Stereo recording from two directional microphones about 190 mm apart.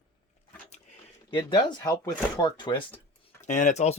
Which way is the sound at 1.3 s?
25° left (ahead or behind).